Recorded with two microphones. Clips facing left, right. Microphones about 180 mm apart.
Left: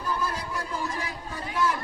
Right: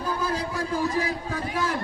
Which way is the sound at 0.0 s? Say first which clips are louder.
Right 3 dB; 90° right.